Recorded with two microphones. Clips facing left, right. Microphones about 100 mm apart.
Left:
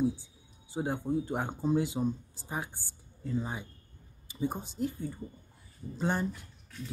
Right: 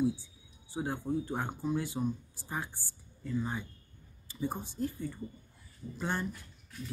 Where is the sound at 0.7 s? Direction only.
15° left (ahead or behind).